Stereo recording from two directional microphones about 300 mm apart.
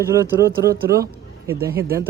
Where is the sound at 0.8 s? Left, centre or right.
Right.